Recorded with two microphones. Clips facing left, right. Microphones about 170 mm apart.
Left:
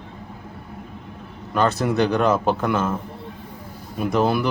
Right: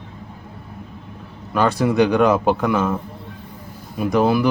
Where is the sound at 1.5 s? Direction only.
10° right (ahead or behind).